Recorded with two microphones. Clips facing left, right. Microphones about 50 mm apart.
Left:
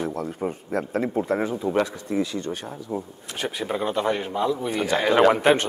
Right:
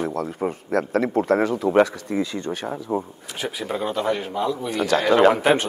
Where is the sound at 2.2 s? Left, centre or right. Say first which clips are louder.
Right 2 dB; right.